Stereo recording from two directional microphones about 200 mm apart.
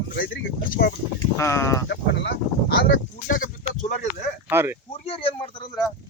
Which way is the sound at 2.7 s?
70° left (ahead or behind).